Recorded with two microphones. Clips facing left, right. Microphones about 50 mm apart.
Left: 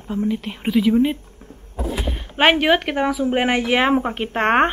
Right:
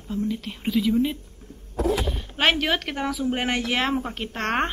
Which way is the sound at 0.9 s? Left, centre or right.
Left.